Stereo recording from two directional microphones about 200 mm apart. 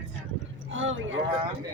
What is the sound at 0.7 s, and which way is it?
Speech, 70° right (ahead or behind).